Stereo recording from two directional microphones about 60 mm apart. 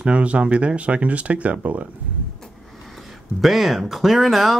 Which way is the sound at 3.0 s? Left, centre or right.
Centre.